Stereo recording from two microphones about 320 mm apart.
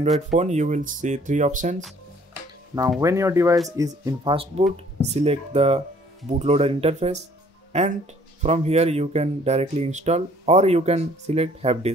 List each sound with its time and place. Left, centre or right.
0.3 s speech: right
2.7 s speech: centre
8.4 s speech: centre